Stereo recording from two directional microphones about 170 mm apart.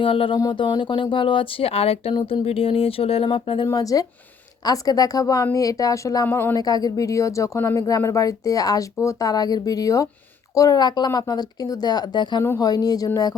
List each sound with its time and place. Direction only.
0.0 s speech: 30° left (ahead or behind)
3.7 s a woman's voice: 20° left (ahead or behind)